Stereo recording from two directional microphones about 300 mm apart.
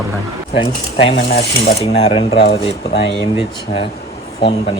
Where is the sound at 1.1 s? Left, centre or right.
Left.